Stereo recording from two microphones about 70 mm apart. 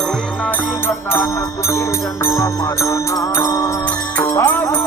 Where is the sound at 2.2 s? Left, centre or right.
Left.